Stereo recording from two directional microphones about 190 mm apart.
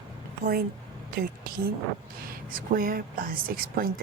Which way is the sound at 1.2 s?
50° right (ahead or behind).